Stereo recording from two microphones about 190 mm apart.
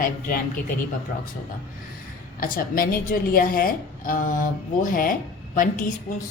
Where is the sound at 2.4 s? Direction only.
50° left (ahead or behind).